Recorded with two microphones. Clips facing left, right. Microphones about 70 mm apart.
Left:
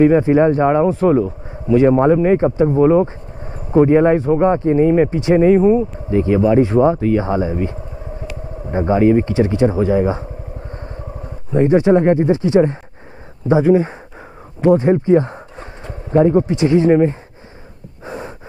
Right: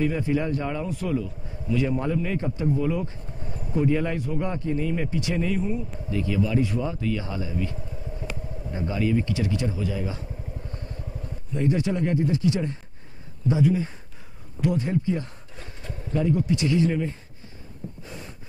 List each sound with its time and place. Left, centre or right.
0.2 s speech: left
10.7 s vehicle: left
11.5 s speech: left
14.6 s a sound: left
16.5 s speech: left
18.0 s snort: left